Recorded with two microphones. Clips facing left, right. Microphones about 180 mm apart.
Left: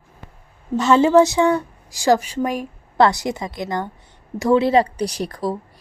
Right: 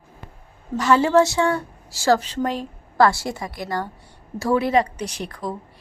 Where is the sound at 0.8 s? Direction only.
25° left (ahead or behind).